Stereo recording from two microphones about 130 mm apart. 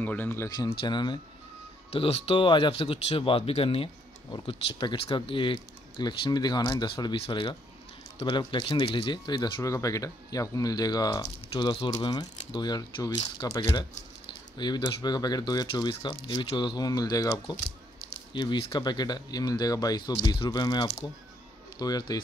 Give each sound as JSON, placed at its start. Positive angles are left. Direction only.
{"t": 0.0, "sound": "speech", "side_deg": 15}
{"t": 0.7, "sound": "speech", "side_deg": 40}
{"t": 1.9, "sound": "speech", "side_deg": 50}
{"t": 9.6, "sound": "speech", "side_deg": 25}
{"t": 11.5, "sound": "speech", "side_deg": 40}
{"t": 11.9, "sound": "speech", "side_deg": 30}